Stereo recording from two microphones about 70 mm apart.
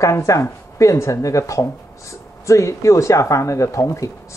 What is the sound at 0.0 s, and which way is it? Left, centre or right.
Speech, left.